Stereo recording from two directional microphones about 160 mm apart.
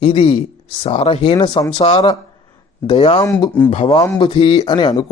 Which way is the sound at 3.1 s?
25° left (ahead or behind).